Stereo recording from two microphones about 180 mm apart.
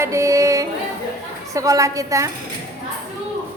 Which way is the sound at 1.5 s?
20° right (ahead or behind).